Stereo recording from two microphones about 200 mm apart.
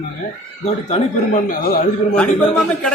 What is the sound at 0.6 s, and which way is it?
Speech, 35° left (ahead or behind).